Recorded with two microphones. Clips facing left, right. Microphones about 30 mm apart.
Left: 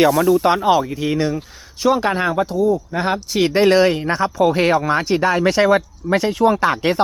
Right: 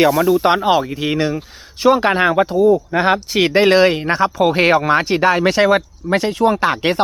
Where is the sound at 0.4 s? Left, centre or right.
Right.